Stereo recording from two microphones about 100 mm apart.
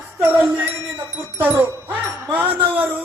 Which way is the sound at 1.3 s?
20° right (ahead or behind).